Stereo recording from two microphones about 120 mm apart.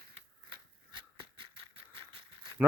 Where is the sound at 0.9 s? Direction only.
45° right (ahead or behind).